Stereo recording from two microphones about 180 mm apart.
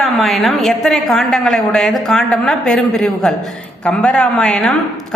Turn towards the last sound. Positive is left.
turn(degrees=5)  # may be behind; listen again after turning